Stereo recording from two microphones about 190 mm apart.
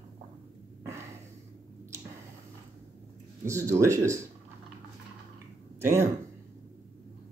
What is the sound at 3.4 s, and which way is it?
Speech, 15° right (ahead or behind).